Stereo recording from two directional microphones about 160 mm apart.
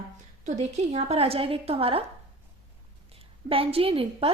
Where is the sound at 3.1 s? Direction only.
35° right (ahead or behind).